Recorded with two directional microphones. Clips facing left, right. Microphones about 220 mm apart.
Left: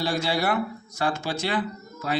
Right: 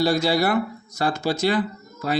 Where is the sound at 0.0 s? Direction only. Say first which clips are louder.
Right 6 dB; 40° right (ahead or behind).